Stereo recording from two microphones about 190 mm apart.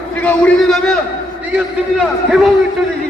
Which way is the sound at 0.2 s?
5° left (ahead or behind).